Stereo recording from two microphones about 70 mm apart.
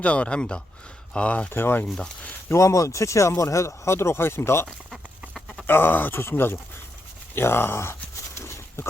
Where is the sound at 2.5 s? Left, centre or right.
Left.